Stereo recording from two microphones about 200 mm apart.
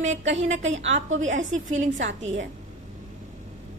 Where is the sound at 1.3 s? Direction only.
40° right (ahead or behind).